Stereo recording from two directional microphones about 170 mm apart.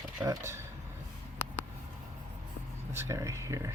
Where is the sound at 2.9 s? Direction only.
15° right (ahead or behind).